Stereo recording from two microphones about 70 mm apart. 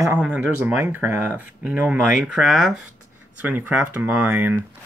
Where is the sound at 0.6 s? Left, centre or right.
Right.